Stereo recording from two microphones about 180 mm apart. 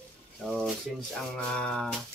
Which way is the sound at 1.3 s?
5° left (ahead or behind).